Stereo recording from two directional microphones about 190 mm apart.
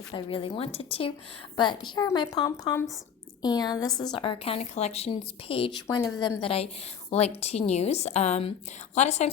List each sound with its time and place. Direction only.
0.1 s a woman's voice: 25° left (ahead or behind)